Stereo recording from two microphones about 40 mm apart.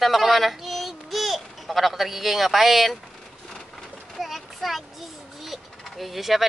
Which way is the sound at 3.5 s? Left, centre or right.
Centre.